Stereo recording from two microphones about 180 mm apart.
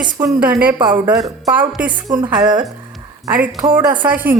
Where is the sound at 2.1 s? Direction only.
20° right (ahead or behind).